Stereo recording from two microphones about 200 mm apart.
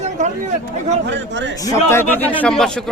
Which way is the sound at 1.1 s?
60° right (ahead or behind).